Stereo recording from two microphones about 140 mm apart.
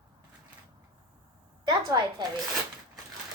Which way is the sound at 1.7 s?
30° right (ahead or behind).